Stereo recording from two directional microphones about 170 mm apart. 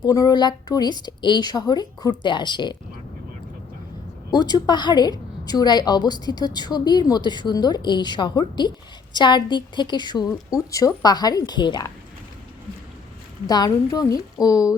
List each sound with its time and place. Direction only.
0.0 s a woman's voice: 20° left (ahead or behind)
4.3 s a woman's voice: 25° left (ahead or behind)
13.5 s a woman's voice: 25° left (ahead or behind)